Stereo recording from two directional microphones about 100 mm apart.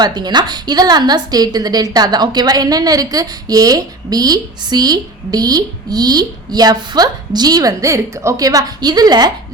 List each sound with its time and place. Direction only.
0.0 s a woman's voice: 45° right (ahead or behind)